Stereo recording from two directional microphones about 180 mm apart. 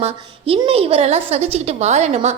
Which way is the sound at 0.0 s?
35° right (ahead or behind).